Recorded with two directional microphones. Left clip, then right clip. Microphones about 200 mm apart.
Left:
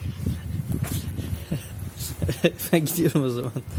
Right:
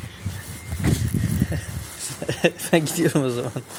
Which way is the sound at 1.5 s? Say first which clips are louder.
Right 4 dB; 20° left (ahead or behind).